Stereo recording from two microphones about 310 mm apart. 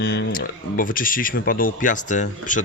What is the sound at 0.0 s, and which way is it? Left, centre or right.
A man's voice, left.